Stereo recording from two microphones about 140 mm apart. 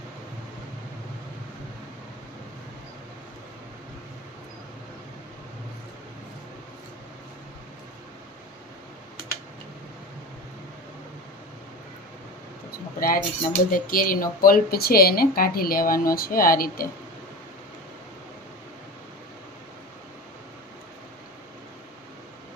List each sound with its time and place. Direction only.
13.0 s speech: 85° left